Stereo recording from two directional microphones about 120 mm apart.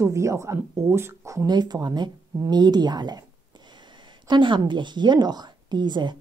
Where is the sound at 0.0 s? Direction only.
25° right (ahead or behind).